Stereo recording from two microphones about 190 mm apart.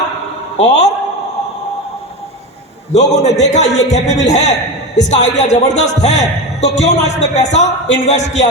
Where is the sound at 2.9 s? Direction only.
35° left (ahead or behind).